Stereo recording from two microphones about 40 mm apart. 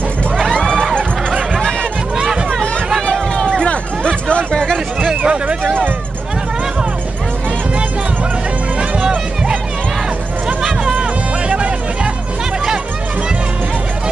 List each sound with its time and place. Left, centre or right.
0.4 s a sound: centre
1.6 s music: centre
3.1 s music: centre
3.6 s hubbub: left
4.5 s a sound: centre
5.1 s speech: right
5.6 s speech: right
8.7 s music: right
10.8 s music: right